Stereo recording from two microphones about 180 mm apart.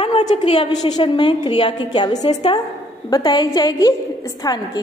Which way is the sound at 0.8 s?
25° left (ahead or behind).